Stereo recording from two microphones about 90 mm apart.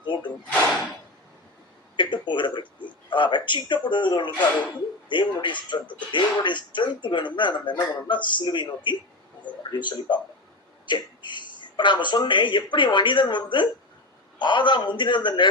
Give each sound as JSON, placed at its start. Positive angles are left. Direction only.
{"t": 0.0, "sound": "a sound", "side_deg": 60}
{"t": 2.0, "sound": "speech", "side_deg": 60}
{"t": 5.8, "sound": "speech", "side_deg": 15}
{"t": 6.1, "sound": "speech", "side_deg": 60}